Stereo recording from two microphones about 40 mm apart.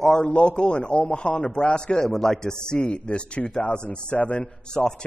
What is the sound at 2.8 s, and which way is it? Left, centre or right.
Speech, left.